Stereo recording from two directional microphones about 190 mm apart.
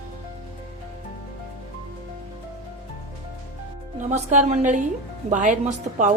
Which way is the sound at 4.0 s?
40° right (ahead or behind).